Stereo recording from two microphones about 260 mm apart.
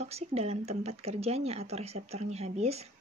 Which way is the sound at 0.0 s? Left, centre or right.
Right.